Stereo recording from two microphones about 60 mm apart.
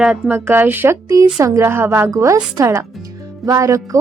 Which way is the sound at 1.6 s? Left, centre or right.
Right.